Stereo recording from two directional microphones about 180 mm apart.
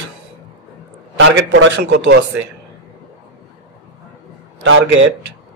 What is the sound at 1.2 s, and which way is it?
Speech, 90° right.